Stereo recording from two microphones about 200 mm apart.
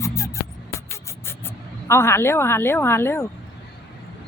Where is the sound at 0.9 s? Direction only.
10° left (ahead or behind).